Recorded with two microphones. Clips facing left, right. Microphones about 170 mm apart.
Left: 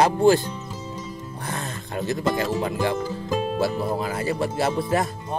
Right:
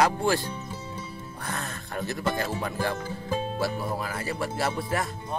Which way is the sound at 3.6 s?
25° left (ahead or behind).